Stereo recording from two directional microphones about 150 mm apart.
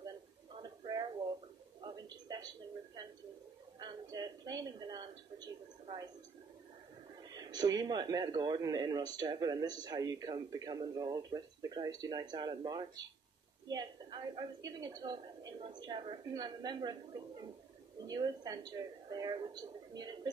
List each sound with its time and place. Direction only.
0.6 s a sound: 30° right (ahead or behind)
3.8 s television: 25° right (ahead or behind)
7.3 s speech: 25° right (ahead or behind)
18.0 s speech: 25° right (ahead or behind)